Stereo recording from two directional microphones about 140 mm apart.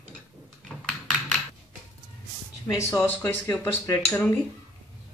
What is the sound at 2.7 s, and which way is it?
Speech, 15° left (ahead or behind).